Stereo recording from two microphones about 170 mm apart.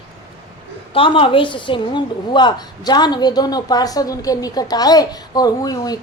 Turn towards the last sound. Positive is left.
turn(degrees=20)  # may be behind; listen again after turning